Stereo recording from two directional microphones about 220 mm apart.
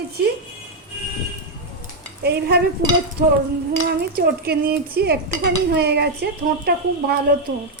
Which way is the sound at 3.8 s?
45° right (ahead or behind).